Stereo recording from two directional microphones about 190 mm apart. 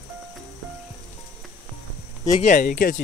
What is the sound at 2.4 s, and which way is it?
Speech, 40° left (ahead or behind).